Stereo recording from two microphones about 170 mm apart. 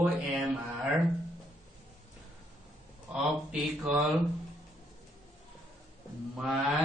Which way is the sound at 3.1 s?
5° right (ahead or behind).